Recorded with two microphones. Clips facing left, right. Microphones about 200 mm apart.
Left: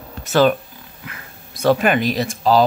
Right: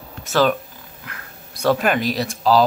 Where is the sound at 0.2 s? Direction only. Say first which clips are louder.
Left 3 dB; centre (ahead or behind).